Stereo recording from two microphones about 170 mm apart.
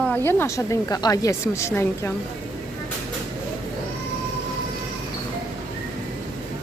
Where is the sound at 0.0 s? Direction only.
10° left (ahead or behind).